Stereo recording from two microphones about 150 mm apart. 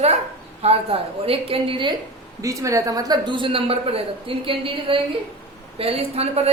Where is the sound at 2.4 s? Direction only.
20° right (ahead or behind).